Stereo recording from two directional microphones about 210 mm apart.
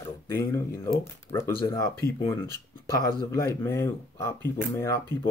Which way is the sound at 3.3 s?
10° left (ahead or behind).